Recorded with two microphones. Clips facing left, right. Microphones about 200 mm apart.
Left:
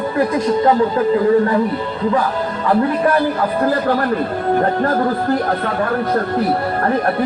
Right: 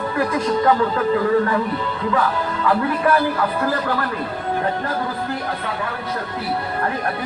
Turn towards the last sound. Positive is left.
turn(degrees=50)  # may be behind; listen again after turning